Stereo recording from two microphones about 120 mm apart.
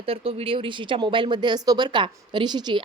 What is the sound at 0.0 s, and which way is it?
Speech, 50° right (ahead or behind).